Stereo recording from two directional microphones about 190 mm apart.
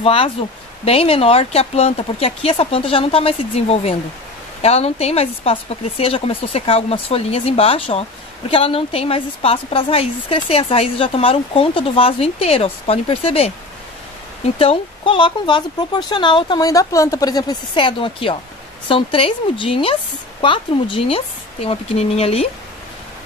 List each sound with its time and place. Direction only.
0.0 s speech: 25° left (ahead or behind)